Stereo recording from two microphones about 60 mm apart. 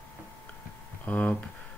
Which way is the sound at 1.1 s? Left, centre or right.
Left.